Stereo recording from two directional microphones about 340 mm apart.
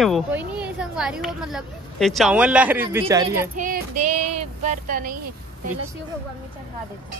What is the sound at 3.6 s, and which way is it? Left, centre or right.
Speech, right.